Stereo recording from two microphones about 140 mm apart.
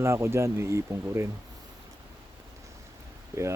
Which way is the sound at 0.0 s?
20° right (ahead or behind).